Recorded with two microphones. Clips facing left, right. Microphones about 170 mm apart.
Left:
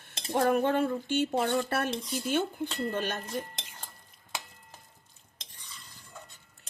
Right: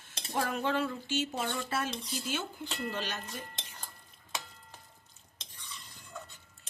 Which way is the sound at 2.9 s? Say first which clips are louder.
Left 5 dB; 55° left (ahead or behind).